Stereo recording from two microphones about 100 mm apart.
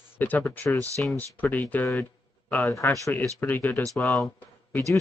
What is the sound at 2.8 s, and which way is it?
Speech, 20° left (ahead or behind).